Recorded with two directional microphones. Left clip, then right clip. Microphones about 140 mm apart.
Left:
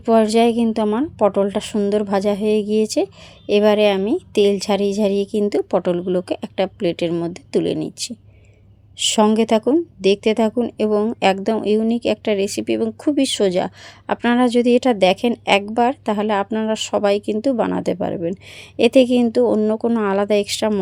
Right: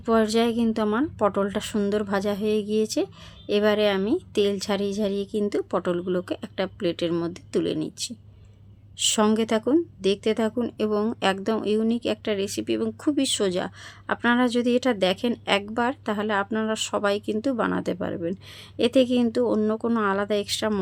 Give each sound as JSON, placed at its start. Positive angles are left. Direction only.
{"t": 0.0, "sound": "a woman's voice", "side_deg": 30}